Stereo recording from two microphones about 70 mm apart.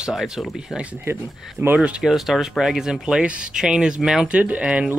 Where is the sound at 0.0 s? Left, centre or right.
Centre.